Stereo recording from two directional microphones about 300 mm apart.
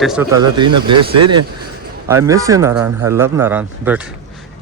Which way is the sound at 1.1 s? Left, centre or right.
Right.